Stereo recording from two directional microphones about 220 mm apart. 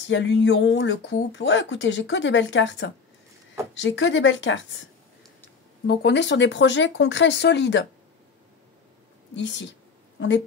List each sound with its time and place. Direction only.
0.1 s speech: 55° left (ahead or behind)
5.9 s speech: 50° left (ahead or behind)
9.3 s speech: 55° left (ahead or behind)